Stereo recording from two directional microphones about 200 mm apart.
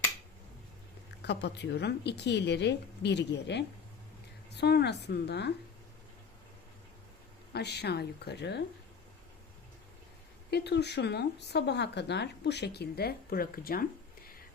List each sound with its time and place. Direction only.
1.2 s speech: 55° left (ahead or behind)
7.5 s speech: 55° left (ahead or behind)
10.5 s speech: 55° left (ahead or behind)